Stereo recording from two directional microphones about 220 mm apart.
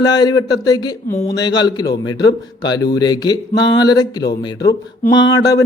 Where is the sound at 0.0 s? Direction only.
20° left (ahead or behind).